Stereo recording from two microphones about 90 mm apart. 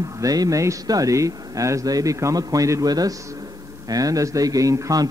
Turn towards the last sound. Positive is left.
turn(degrees=-40)  # may be behind; listen again after turning